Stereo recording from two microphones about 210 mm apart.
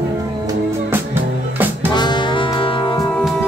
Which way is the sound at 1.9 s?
20° left (ahead or behind).